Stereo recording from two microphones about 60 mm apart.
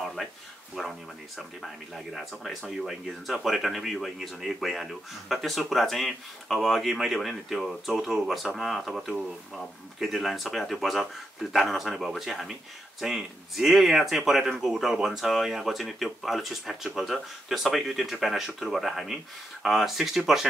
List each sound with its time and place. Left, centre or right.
0.2 s speech: centre
2.1 s speech: centre